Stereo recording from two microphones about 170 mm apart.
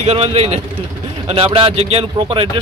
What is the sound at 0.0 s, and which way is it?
A man's voice, 35° right (ahead or behind).